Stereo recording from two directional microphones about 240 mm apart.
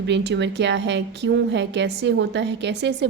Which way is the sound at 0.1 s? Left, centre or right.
Right.